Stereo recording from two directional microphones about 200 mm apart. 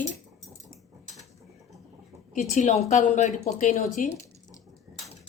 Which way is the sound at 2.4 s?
35° left (ahead or behind).